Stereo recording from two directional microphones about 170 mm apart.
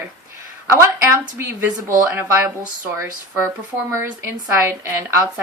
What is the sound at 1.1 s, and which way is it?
A woman's voice, 15° right (ahead or behind).